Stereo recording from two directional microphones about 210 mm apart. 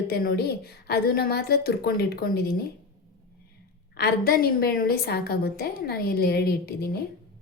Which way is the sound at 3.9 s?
45° left (ahead or behind).